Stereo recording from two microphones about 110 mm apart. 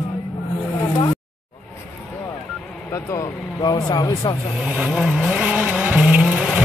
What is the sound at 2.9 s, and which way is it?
Vehicle, 30° left (ahead or behind).